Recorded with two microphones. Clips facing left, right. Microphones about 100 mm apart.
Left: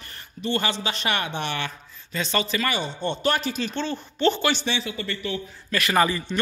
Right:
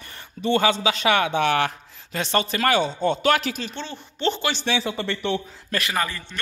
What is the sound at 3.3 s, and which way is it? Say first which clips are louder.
Speech: right 2 dB; 90° right.